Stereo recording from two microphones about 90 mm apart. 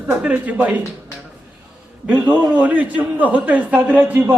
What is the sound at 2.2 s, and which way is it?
A man's voice, 15° right (ahead or behind).